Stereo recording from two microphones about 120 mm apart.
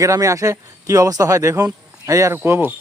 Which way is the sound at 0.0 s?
25° right (ahead or behind).